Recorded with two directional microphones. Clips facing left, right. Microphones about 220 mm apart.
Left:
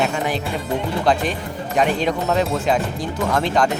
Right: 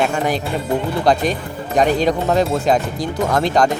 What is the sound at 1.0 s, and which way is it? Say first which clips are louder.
Speech: right 3 dB; 40° right (ahead or behind).